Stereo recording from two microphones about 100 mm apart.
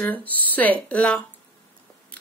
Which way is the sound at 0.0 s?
15° left (ahead or behind).